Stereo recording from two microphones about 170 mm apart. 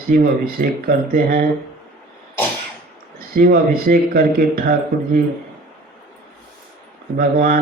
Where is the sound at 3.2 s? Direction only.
60° right (ahead or behind).